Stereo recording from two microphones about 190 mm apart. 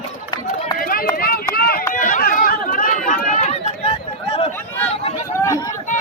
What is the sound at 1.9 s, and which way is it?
Chatter, 45° left (ahead or behind).